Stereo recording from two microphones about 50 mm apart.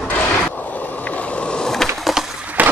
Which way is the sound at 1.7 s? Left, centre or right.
Centre.